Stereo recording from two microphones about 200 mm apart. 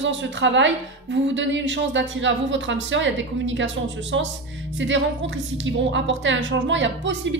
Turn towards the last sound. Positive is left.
turn(degrees=-65)  # may be behind; listen again after turning